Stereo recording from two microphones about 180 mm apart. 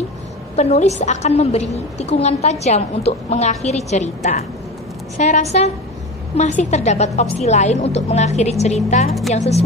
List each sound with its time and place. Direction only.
0.6 s a woman's voice: 35° left (ahead or behind)